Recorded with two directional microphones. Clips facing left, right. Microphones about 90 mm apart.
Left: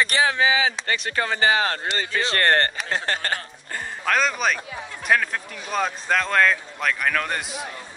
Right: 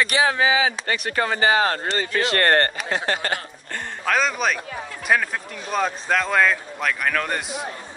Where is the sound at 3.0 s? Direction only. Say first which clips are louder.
Right 2 dB; 35° left (ahead or behind).